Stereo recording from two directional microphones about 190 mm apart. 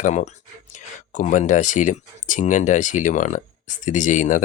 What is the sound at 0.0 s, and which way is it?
Speech, 40° left (ahead or behind).